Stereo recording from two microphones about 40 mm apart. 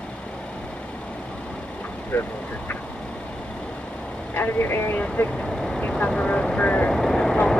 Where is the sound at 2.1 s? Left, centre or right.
Left.